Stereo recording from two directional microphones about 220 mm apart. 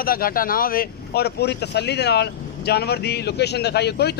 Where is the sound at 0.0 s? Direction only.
40° left (ahead or behind).